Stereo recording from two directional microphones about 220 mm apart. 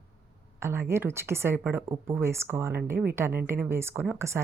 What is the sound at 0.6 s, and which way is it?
Speech, 10° right (ahead or behind).